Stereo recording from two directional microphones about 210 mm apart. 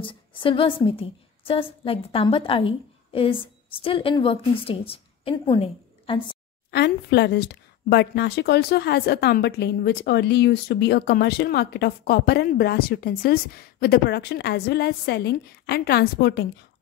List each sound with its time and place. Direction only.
0.0 s a woman's voice: 25° left (ahead or behind)
6.7 s a woman's voice: 50° left (ahead or behind)